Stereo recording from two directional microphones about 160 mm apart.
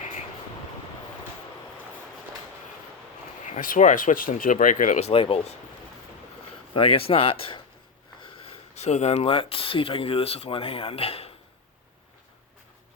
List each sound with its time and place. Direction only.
3.4 s speech: 55° left (ahead or behind); by 5.5 s 40° left (ahead or behind)
6.7 s speech: 35° left (ahead or behind)